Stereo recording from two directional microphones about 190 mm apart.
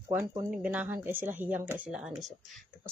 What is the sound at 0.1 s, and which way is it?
Speech, 15° right (ahead or behind).